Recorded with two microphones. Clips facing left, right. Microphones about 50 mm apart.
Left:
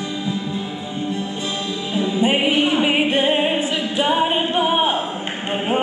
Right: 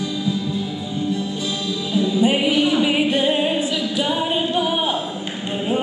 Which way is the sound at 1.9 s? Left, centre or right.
Left.